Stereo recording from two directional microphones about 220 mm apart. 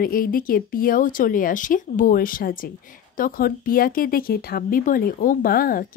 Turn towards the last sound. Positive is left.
turn(degrees=40)  # may be behind; listen again after turning